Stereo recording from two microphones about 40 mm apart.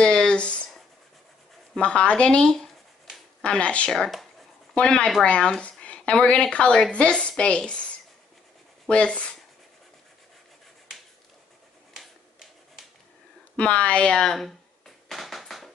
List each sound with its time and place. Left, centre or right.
0.0 s a sound: left
1.8 s a woman's voice: left
3.4 s a woman's voice: left
5.6 s a sound: left
6.1 s a woman's voice: left
8.8 s speech: left
12.0 s typewriter: centre
13.6 s a woman's voice: left
14.1 s speech: centre
15.0 s a sound: centre